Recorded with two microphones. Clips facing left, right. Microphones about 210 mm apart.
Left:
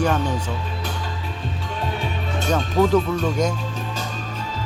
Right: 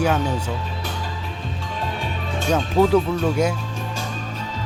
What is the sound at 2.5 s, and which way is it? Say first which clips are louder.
Speech: right 1 dB; 10° right (ahead or behind).